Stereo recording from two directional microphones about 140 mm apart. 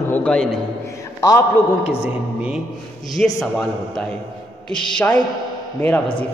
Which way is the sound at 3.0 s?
5° left (ahead or behind).